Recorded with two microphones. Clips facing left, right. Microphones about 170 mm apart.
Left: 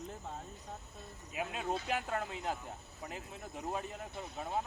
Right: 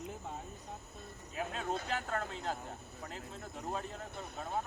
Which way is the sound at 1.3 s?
15° left (ahead or behind).